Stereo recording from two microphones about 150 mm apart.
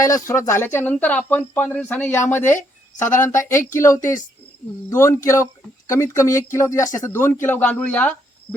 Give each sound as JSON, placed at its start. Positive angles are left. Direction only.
{"t": 0.1, "sound": "speech", "side_deg": 20}